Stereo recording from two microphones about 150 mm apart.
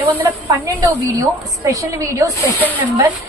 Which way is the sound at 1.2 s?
25° right (ahead or behind).